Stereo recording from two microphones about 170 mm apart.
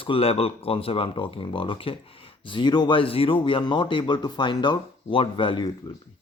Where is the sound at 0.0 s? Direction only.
35° left (ahead or behind).